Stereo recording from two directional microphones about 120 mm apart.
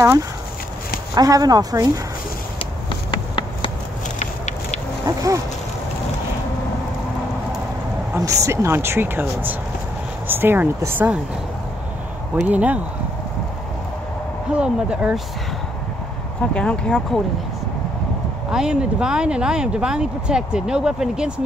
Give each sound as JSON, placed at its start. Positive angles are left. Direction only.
{"t": 1.1, "sound": "speech", "side_deg": -30}
{"t": 2.9, "sound": "a sound", "side_deg": 45}
{"t": 5.0, "sound": "speech", "side_deg": -30}
{"t": 8.2, "sound": "speech", "side_deg": -30}
{"t": 12.4, "sound": "speech", "side_deg": -10}
{"t": 14.5, "sound": "speech", "side_deg": -10}
{"t": 16.5, "sound": "speech", "side_deg": 10}
{"t": 18.5, "sound": "speech", "side_deg": -5}